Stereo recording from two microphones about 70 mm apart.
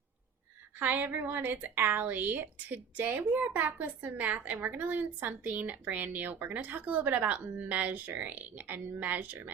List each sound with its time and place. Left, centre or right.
0.8 s a woman's voice: right